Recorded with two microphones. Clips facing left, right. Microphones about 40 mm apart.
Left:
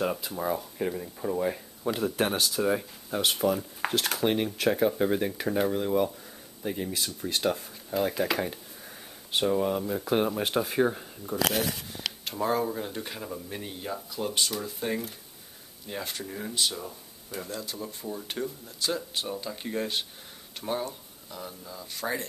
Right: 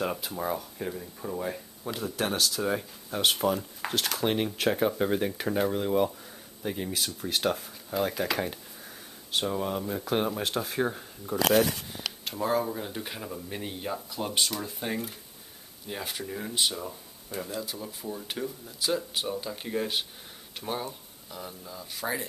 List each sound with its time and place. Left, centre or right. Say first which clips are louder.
0.0 s speech: left 1 dB; centre
0.6 s speech: left 4 dB; centre
2.0 s speech: left 4 dB; left
2.2 s speech: even; centre
15.9 s speech: even; centre